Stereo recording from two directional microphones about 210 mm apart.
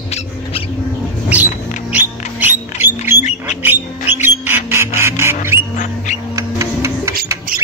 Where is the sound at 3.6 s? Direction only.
10° right (ahead or behind).